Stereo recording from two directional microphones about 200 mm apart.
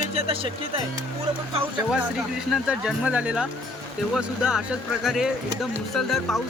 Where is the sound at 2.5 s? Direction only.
5° right (ahead or behind).